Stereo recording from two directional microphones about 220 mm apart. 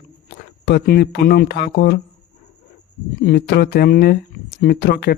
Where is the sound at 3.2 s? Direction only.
50° left (ahead or behind).